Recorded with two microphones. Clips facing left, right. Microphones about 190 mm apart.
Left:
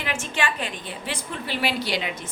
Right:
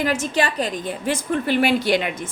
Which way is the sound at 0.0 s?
40° right (ahead or behind).